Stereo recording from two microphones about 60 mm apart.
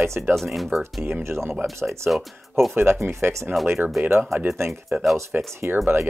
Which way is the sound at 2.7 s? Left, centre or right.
Right.